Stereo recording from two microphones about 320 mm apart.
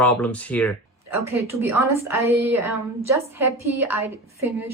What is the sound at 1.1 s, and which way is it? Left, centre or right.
A woman's voice, centre.